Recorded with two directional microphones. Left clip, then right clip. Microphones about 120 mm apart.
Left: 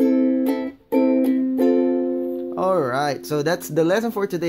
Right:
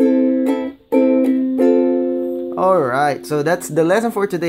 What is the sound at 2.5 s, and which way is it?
Speech, 15° left (ahead or behind).